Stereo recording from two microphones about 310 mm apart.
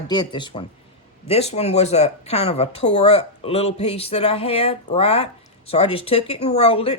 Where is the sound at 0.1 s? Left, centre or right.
Centre.